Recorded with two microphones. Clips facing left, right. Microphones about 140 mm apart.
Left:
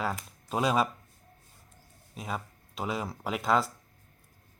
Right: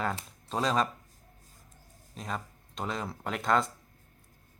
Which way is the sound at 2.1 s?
5° left (ahead or behind).